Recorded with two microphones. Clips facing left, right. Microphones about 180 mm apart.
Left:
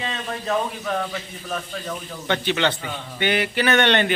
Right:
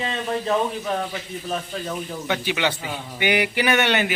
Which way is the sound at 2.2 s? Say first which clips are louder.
Left 3 dB; 10° right (ahead or behind).